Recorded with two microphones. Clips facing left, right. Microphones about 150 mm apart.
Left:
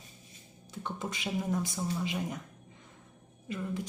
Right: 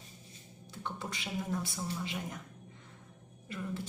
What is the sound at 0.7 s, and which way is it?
A man's voice, 20° left (ahead or behind).